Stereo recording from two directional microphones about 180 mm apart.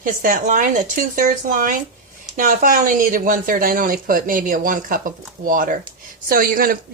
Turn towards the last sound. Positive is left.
turn(degrees=-55)  # may be behind; listen again after turning